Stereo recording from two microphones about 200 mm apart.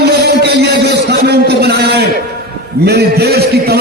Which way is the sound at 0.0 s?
55° right (ahead or behind).